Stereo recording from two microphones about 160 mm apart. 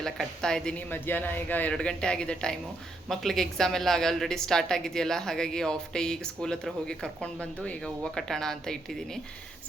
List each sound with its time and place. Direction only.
0.0 s a woman's voice: 5° left (ahead or behind)